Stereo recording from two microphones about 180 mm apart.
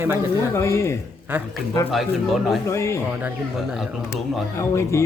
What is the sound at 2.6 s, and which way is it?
Speech, 15° left (ahead or behind).